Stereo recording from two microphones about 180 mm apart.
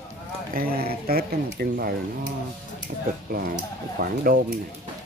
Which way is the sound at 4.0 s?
55° right (ahead or behind).